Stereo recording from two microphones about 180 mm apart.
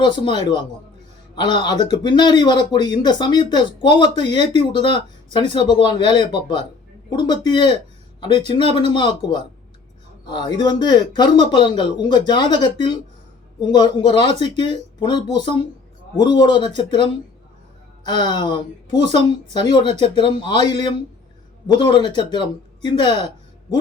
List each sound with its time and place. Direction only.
0.0 s speech: 25° left (ahead or behind)
10.2 s speech: 25° left (ahead or behind)
19.0 s a woman's voice: 35° right (ahead or behind)
19.9 s speech: 25° left (ahead or behind)